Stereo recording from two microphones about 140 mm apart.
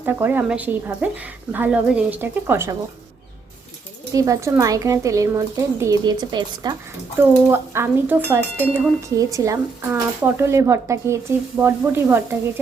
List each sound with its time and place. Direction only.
0.0 s a woman's voice: 15° right (ahead or behind)
4.1 s speech: 25° right (ahead or behind)
7.2 s a woman's voice: 15° right (ahead or behind)